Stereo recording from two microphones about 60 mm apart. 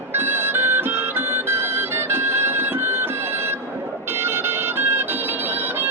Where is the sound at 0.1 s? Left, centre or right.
Right.